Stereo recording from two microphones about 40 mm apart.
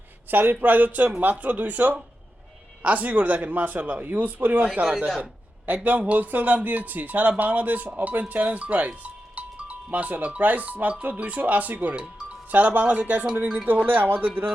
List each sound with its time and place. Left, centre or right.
0.3 s speech: right
4.6 s speech: right
13.8 s speech: right